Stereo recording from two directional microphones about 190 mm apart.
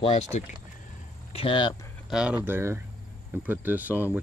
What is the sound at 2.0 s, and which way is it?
Speech, 5° right (ahead or behind).